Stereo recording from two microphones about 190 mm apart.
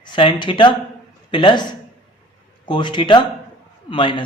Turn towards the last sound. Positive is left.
turn(degrees=25)  # may be behind; listen again after turning